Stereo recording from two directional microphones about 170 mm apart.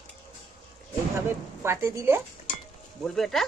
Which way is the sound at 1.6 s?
15° right (ahead or behind).